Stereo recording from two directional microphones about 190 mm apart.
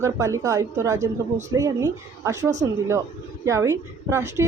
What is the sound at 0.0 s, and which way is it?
A woman's voice, 15° right (ahead or behind).